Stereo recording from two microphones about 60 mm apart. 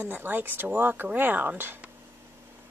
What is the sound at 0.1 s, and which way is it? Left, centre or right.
Speech, right.